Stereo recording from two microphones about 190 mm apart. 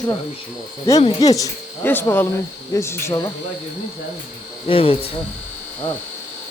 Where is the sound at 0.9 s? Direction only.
20° left (ahead or behind).